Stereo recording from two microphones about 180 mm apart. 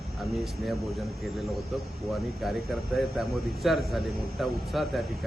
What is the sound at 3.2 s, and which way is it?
A man's voice, centre (ahead or behind).